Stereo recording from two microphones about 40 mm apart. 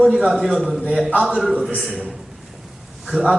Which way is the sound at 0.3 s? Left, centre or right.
Centre.